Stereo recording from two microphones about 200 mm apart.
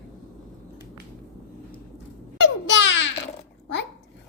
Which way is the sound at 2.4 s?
65° left (ahead or behind).